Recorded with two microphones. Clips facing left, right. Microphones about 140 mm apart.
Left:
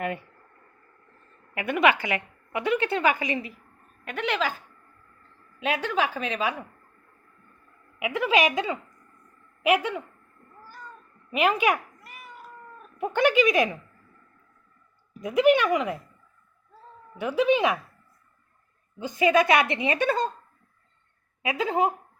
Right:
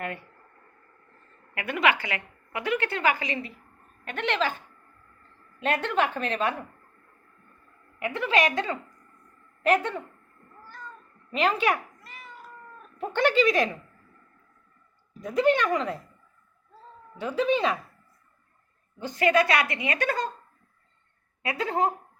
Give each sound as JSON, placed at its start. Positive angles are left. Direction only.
{"t": 1.5, "sound": "a woman's voice", "side_deg": 20}
{"t": 4.0, "sound": "a woman's voice", "side_deg": 5}
{"t": 7.9, "sound": "a woman's voice", "side_deg": 10}
{"t": 11.3, "sound": "cat", "side_deg": 10}
{"t": 12.8, "sound": "speech", "side_deg": 10}
{"t": 15.2, "sound": "a woman's voice", "side_deg": 15}
{"t": 17.2, "sound": "a woman's voice", "side_deg": 15}
{"t": 18.9, "sound": "a woman's voice", "side_deg": 15}
{"t": 21.4, "sound": "a woman's voice", "side_deg": 15}